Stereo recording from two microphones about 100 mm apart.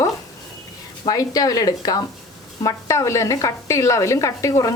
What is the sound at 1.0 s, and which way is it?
A woman's voice, 40° left (ahead or behind).